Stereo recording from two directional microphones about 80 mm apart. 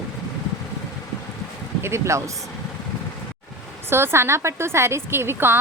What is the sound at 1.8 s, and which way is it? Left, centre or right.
Speech, right.